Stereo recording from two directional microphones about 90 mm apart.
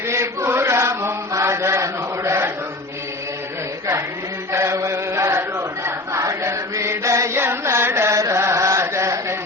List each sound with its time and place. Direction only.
0.1 s chant: 30° right (ahead or behind)
4.5 s chant: 30° right (ahead or behind)